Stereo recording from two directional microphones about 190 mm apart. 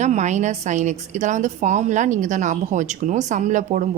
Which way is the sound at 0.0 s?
40° right (ahead or behind).